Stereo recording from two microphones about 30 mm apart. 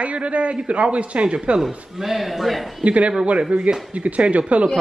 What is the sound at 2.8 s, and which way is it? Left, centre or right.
Speech, right.